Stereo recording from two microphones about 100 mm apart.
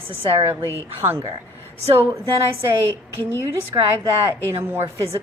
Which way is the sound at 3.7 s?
40° right (ahead or behind).